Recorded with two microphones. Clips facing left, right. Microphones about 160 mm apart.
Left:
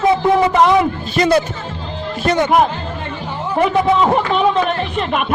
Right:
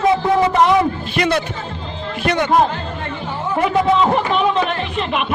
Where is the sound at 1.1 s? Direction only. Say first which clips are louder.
Left 5 dB; 35° left (ahead or behind).